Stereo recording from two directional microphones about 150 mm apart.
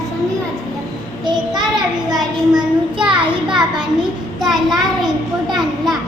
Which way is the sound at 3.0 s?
35° right (ahead or behind).